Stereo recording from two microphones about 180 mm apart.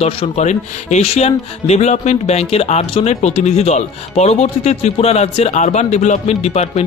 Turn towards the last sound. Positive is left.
turn(degrees=35)  # may be behind; listen again after turning